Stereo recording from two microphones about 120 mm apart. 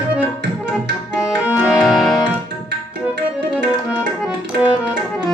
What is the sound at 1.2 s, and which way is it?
Music, 10° right (ahead or behind).